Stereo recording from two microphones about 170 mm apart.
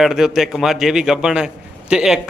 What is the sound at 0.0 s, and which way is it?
A man's voice, 5° right (ahead or behind).